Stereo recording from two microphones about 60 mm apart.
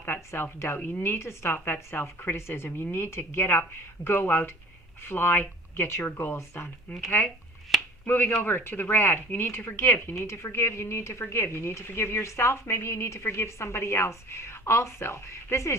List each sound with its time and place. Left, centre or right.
0.0 s a woman's voice: left
8.0 s speech: left